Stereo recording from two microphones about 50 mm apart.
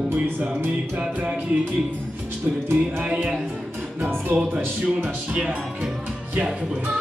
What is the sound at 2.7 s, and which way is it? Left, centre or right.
Music, right.